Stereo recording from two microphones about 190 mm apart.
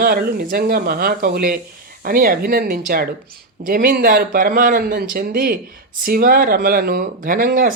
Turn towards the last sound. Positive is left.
turn(degrees=-50)  # may be behind; listen again after turning